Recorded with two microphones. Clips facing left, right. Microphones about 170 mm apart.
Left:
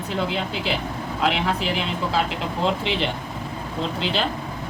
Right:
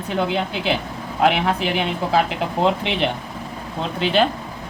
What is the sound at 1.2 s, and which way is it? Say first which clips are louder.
Speech: right 5 dB; 60° right (ahead or behind).